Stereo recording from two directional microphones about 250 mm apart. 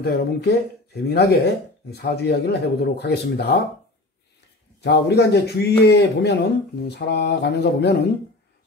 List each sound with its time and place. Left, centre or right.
0.0 s speech: left
4.8 s speech: left